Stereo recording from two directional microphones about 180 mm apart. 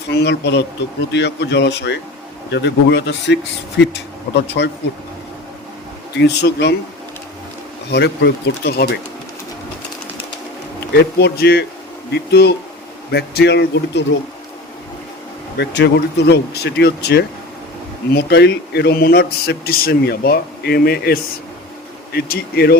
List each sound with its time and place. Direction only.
0.1 s speech: 70° left (ahead or behind)
4.4 s speech: 70° left (ahead or behind)
6.1 s speech: 70° left (ahead or behind)
7.9 s a man's voice: 65° left (ahead or behind)
11.2 s a man's voice: 60° left (ahead or behind)
15.5 s a man's voice: 70° left (ahead or behind)